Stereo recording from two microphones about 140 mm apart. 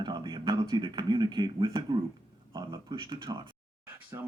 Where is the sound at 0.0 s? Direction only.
30° right (ahead or behind).